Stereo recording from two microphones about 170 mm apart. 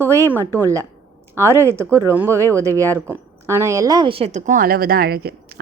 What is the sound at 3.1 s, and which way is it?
A woman's voice, 15° right (ahead or behind).